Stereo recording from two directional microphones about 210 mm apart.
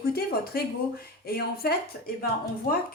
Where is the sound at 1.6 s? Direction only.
45° left (ahead or behind).